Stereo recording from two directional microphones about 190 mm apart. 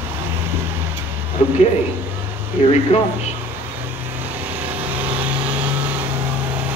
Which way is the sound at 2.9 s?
35° left (ahead or behind).